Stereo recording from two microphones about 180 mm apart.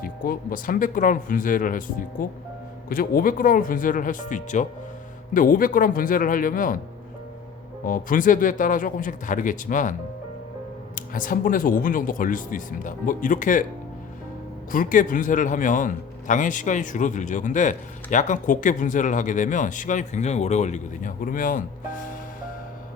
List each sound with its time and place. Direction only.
0.0 s a man's voice: 50° left (ahead or behind)
7.9 s a man's voice: 50° left (ahead or behind)
10.9 s a man's voice: 50° left (ahead or behind)
14.7 s a man's voice: 50° left (ahead or behind)